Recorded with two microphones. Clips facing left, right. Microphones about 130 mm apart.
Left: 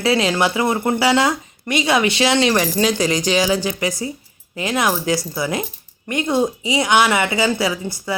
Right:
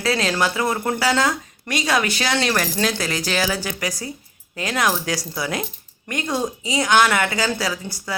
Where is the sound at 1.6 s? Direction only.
5° left (ahead or behind).